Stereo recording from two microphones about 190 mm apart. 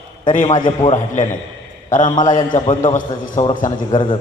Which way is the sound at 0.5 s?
25° left (ahead or behind).